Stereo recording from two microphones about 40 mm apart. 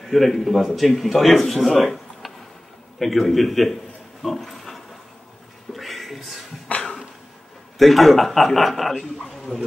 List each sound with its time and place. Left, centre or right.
0.0 s a man's voice: centre
4.2 s pig: centre
5.7 s a sound: centre
6.7 s cough: left
7.8 s a man's voice: centre